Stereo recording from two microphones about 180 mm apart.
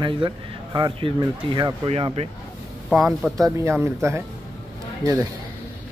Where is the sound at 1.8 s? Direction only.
35° right (ahead or behind).